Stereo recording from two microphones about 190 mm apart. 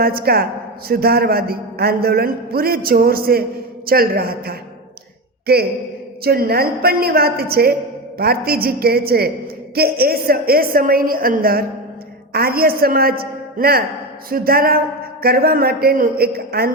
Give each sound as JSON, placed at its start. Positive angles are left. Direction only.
{"t": 0.0, "sound": "a man's voice", "side_deg": -50}
{"t": 6.2, "sound": "a man's voice", "side_deg": -55}